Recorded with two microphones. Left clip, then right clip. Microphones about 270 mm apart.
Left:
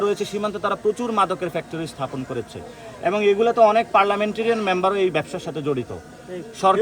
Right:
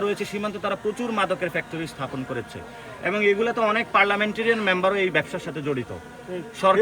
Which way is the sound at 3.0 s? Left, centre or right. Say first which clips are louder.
Left 3 dB; centre.